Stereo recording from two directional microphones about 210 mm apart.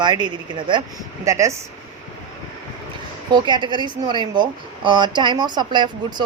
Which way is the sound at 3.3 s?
20° right (ahead or behind).